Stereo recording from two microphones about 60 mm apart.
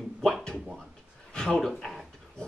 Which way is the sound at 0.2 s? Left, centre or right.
Centre.